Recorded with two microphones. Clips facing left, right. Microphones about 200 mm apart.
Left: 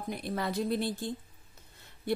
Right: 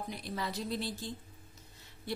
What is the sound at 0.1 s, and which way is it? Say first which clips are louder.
A woman's voice: left 9 dB; 55° left (ahead or behind).